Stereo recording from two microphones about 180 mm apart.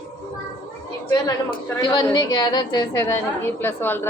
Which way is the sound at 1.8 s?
25° left (ahead or behind).